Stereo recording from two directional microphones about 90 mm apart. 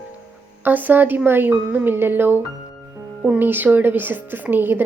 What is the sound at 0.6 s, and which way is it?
A woman's voice, 20° right (ahead or behind).